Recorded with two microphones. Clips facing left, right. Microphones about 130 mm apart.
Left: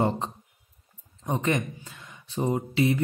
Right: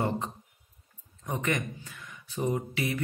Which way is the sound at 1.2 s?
25° left (ahead or behind).